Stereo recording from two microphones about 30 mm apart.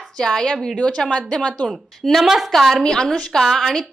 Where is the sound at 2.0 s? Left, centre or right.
Centre.